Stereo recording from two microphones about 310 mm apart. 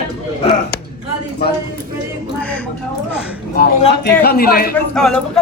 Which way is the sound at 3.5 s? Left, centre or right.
Left.